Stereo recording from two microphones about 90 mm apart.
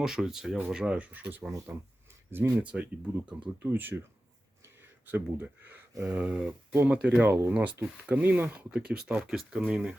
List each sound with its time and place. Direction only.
0.0 s speech: 5° right (ahead or behind)